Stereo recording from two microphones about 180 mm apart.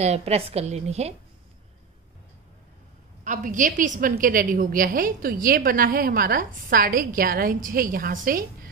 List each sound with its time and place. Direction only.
0.0 s a woman's voice: 35° right (ahead or behind)
3.3 s a woman's voice: 45° right (ahead or behind)